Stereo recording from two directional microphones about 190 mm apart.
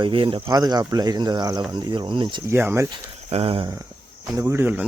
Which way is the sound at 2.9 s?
30° right (ahead or behind).